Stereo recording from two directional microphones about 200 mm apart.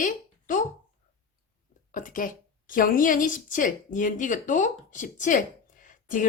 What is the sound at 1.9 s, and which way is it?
A woman's voice, 40° left (ahead or behind).